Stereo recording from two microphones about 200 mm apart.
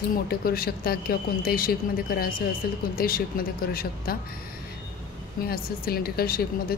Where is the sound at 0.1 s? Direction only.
50° left (ahead or behind).